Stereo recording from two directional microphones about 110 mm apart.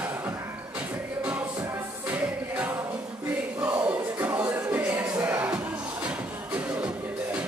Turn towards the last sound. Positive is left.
turn(degrees=-10)  # may be behind; listen again after turning